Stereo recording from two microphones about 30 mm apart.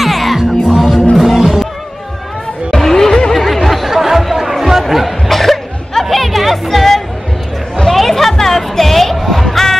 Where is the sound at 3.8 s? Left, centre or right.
Centre.